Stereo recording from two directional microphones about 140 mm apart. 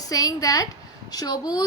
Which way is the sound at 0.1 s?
25° left (ahead or behind).